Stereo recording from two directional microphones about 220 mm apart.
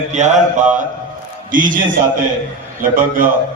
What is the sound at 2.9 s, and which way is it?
Speech, 40° right (ahead or behind).